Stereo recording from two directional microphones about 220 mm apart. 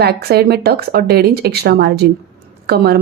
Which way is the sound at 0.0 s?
45° right (ahead or behind).